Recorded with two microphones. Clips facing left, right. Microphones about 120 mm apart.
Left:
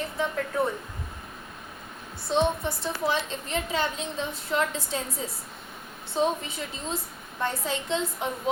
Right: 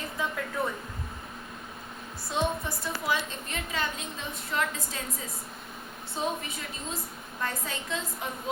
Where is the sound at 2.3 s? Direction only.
25° left (ahead or behind).